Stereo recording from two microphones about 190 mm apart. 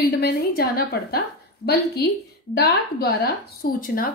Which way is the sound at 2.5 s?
55° left (ahead or behind).